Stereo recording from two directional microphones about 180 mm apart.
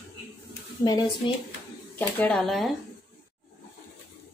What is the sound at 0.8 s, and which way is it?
Speech, 20° left (ahead or behind).